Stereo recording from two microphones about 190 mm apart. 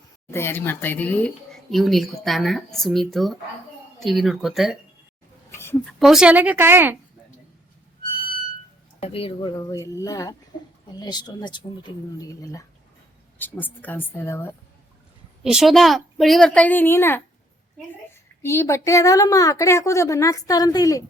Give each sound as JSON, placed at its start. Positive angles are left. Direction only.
{"t": 0.3, "sound": "a woman's voice", "side_deg": 10}
{"t": 5.5, "sound": "a sound", "side_deg": 15}
{"t": 6.0, "sound": "speech", "side_deg": 0}
{"t": 9.0, "sound": "speech", "side_deg": 30}
{"t": 9.6, "sound": "a woman's voice", "side_deg": 15}
{"t": 15.4, "sound": "a woman's voice", "side_deg": 0}
{"t": 18.4, "sound": "a woman's voice", "side_deg": 15}